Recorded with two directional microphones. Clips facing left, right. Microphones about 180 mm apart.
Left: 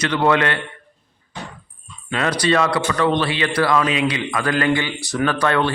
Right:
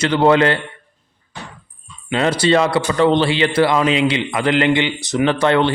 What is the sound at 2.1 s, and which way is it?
A man's voice, 25° right (ahead or behind).